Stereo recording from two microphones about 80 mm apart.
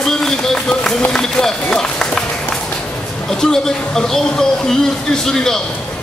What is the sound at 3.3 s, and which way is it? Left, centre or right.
A man's voice, centre.